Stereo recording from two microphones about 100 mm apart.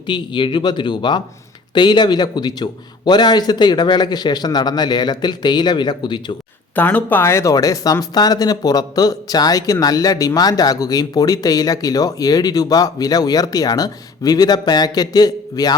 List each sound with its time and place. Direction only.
0.1 s a man's voice: 55° left (ahead or behind)
6.7 s speech: 20° left (ahead or behind); by 15.7 s 40° left (ahead or behind)